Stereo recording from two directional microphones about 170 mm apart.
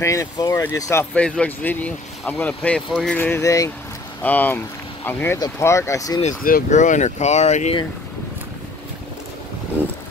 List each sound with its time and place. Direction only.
0.0 s speech: 15° left (ahead or behind)
1.1 s speech: 5° left (ahead or behind)
3.2 s speech: 15° left (ahead or behind)
6.2 s speech: 50° left (ahead or behind)